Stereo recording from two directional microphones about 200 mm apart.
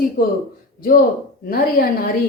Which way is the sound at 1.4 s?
45° left (ahead or behind).